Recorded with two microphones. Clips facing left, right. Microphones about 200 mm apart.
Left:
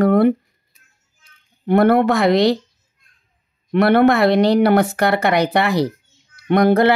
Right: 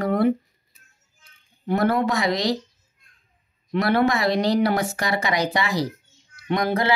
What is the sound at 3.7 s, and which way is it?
Speech, 60° left (ahead or behind).